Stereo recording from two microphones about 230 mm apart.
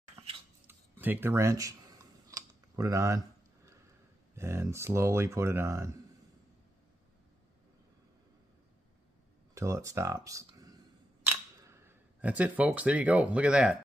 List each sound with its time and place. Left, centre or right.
0.7 s a sound: centre
4.4 s speech: centre
9.5 s speech: centre
11.2 s camera: centre